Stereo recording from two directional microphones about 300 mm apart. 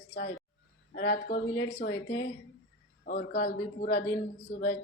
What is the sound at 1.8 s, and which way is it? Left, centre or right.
Speech, left.